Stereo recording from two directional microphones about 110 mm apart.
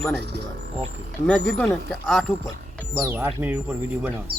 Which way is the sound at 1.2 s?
10° left (ahead or behind).